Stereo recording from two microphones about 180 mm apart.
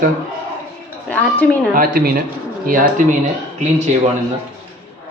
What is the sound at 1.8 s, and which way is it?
A woman's voice, 55° right (ahead or behind).